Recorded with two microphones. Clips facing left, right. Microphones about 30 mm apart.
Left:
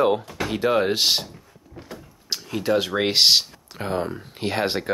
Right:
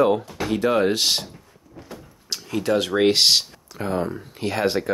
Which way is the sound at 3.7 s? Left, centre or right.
Left.